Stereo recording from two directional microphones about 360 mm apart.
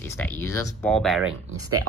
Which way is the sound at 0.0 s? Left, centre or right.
Centre.